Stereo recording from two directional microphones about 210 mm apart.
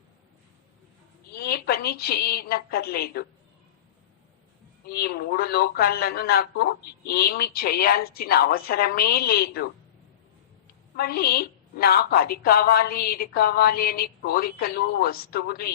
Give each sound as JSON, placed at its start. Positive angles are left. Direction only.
{"t": 1.3, "sound": "a woman's voice", "side_deg": 50}
{"t": 4.9, "sound": "speech", "side_deg": 45}
{"t": 10.9, "sound": "speech", "side_deg": 45}